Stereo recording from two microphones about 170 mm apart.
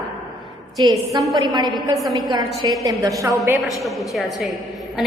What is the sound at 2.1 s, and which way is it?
A woman's voice, 25° right (ahead or behind).